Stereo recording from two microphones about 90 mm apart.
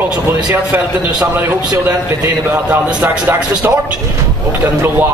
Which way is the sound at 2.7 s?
20° right (ahead or behind).